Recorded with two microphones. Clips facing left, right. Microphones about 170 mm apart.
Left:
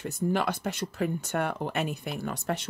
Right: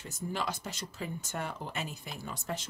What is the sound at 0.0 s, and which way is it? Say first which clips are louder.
Speech: left 8 dB; 60° left (ahead or behind).